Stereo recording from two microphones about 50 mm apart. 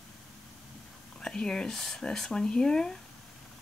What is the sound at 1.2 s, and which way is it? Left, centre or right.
Speech, centre.